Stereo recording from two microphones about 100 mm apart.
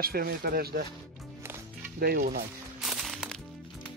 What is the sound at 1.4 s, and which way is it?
Music, 25° right (ahead or behind).